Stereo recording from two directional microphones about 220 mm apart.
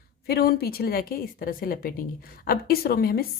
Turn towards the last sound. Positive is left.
turn(degrees=45)  # may be behind; listen again after turning